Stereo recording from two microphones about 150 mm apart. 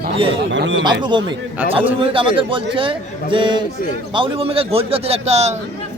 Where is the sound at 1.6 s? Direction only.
10° right (ahead or behind).